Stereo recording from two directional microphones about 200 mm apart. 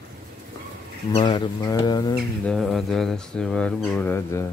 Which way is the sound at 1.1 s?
25° left (ahead or behind).